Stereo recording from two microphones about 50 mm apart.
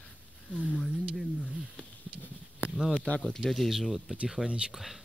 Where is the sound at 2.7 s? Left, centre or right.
Centre.